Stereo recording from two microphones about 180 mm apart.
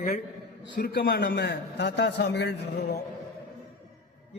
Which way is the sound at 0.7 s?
55° left (ahead or behind).